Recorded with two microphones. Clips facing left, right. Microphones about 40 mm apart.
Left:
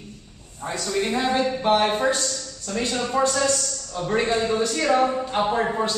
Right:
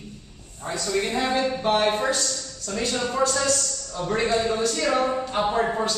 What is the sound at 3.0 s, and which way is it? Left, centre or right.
Speech, centre.